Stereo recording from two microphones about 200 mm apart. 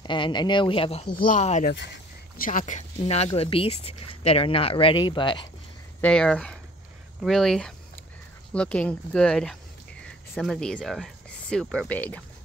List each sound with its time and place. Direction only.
0.0 s speech: 25° left (ahead or behind)
1.1 s speech: 40° left (ahead or behind); by 5.5 s 25° left (ahead or behind)
5.9 s speech: 5° left (ahead or behind)